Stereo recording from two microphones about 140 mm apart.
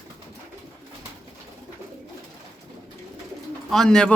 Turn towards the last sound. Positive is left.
turn(degrees=5)  # may be behind; listen again after turning